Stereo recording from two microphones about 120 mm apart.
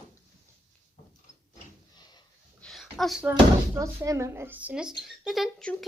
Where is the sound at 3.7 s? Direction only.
25° right (ahead or behind).